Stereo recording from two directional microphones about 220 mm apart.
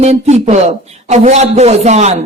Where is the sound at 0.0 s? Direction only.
30° right (ahead or behind).